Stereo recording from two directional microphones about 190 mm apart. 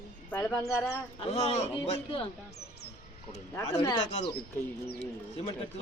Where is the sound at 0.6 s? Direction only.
15° left (ahead or behind).